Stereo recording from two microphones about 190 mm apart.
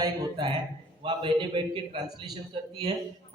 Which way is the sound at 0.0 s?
25° right (ahead or behind).